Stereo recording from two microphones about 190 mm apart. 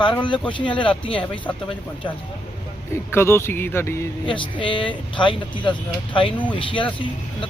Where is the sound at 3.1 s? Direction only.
15° left (ahead or behind).